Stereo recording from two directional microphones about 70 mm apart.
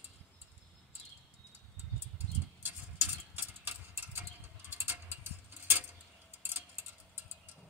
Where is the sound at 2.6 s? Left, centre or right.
Right.